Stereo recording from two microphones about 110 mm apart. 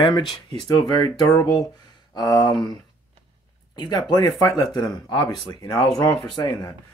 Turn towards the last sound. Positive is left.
turn(degrees=40)  # may be behind; listen again after turning